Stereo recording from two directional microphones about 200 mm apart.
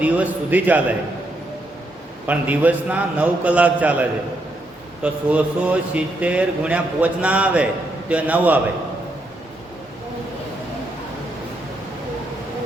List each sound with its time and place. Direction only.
0.0 s a man's voice: 10° right (ahead or behind)
2.2 s a man's voice: 10° right (ahead or behind)